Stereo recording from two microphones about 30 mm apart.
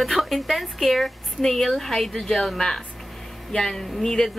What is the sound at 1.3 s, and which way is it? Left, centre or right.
A woman's voice, centre.